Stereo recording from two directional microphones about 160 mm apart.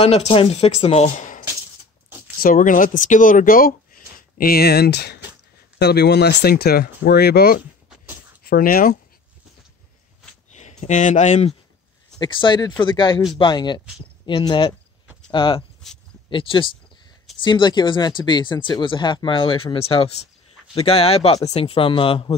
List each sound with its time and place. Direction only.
0.0 s speech: 40° left (ahead or behind)
2.4 s speech: 60° left (ahead or behind); by 7.6 s 80° left
8.5 s speech: 65° left (ahead or behind)
10.5 s speech: 45° left (ahead or behind)
12.2 s speech: 30° left (ahead or behind)